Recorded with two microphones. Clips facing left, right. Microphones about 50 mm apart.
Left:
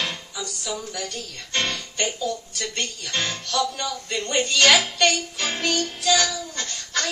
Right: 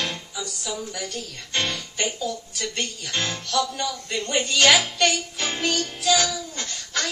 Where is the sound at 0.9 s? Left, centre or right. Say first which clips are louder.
Even; centre.